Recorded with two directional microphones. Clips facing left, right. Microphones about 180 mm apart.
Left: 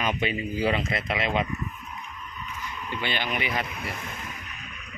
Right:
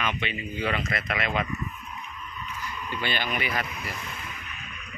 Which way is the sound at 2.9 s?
15° left (ahead or behind).